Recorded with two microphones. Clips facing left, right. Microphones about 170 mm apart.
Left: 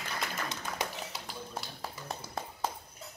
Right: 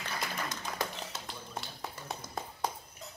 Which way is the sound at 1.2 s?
5° left (ahead or behind).